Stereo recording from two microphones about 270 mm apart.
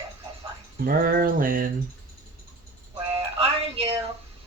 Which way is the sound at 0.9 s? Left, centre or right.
Right.